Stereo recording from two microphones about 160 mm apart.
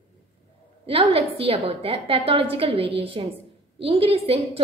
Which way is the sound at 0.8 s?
35° right (ahead or behind).